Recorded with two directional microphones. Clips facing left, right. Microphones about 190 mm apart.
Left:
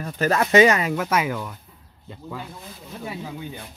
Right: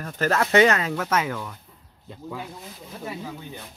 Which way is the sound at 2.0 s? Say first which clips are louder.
Even; 5° right (ahead or behind).